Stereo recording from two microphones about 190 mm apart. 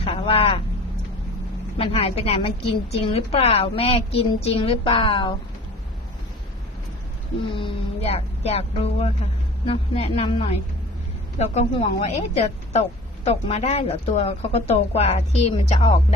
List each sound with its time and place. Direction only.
0.0 s a man's voice: 30° left (ahead or behind)
1.8 s a woman's voice: 30° left (ahead or behind)
7.5 s a woman's voice: 30° left (ahead or behind)